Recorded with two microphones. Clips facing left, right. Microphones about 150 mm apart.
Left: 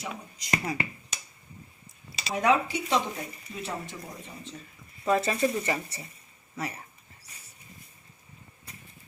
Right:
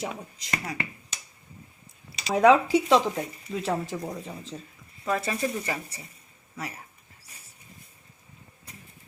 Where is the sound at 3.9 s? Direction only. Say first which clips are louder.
Right 9 dB; 65° right (ahead or behind).